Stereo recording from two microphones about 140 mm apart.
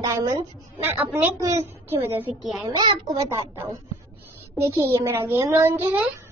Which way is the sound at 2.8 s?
30° right (ahead or behind).